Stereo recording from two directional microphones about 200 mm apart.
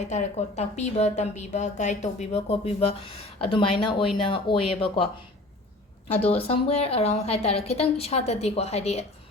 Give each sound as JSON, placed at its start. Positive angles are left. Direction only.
{"t": 0.1, "sound": "a woman's voice", "side_deg": 35}
{"t": 6.2, "sound": "a woman's voice", "side_deg": 30}